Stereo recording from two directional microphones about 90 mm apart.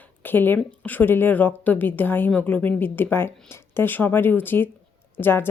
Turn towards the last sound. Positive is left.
turn(degrees=25)  # may be behind; listen again after turning